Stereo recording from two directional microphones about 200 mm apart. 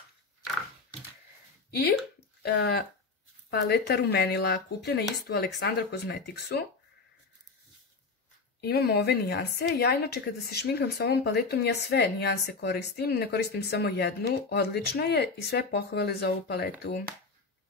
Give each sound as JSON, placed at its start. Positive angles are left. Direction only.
{"t": 1.7, "sound": "a woman's voice", "side_deg": 50}
{"t": 8.5, "sound": "a woman's voice", "side_deg": 55}